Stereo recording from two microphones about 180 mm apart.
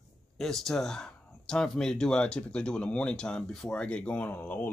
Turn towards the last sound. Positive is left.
turn(degrees=10)  # may be behind; listen again after turning